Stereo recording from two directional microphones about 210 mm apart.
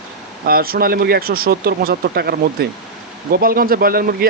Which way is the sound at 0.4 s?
45° right (ahead or behind).